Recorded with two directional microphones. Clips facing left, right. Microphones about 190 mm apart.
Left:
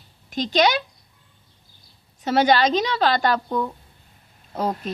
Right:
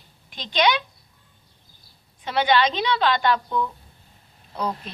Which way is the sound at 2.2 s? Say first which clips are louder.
Left 3 dB; 40° left (ahead or behind).